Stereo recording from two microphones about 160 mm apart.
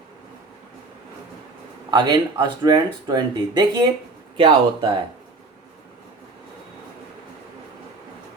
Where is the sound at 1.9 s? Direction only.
25° right (ahead or behind).